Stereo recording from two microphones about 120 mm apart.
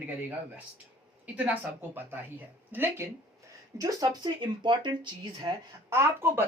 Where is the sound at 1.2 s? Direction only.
15° right (ahead or behind).